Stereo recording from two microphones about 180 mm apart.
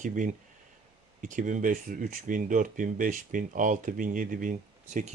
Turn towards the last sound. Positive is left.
turn(degrees=-45)  # may be behind; listen again after turning